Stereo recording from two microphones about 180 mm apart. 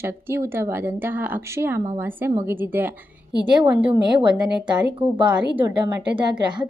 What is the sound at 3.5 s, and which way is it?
Speech, 25° right (ahead or behind).